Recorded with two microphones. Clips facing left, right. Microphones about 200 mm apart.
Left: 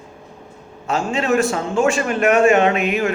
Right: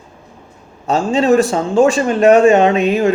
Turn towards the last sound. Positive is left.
turn(degrees=-30)  # may be behind; listen again after turning